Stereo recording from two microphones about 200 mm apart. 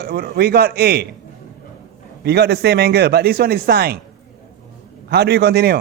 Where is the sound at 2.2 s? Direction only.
55° right (ahead or behind).